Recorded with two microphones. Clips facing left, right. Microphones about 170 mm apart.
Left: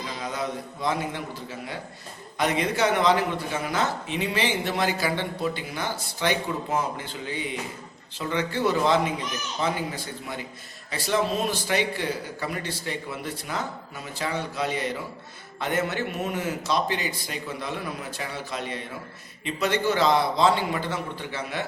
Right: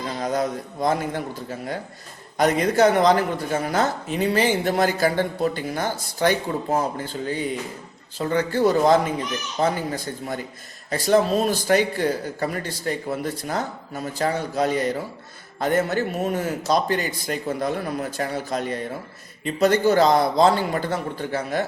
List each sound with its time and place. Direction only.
0.2 s a man's voice: 45° right (ahead or behind)